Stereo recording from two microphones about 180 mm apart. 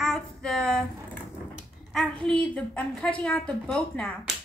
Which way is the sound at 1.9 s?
Centre (ahead or behind).